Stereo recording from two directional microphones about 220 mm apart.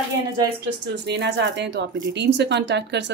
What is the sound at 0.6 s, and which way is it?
Speech, 50° right (ahead or behind).